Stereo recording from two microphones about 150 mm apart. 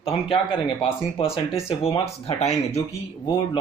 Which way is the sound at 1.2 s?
40° left (ahead or behind).